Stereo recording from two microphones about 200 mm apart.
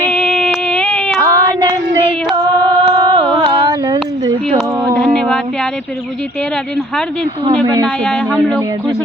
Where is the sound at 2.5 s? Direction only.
20° right (ahead or behind).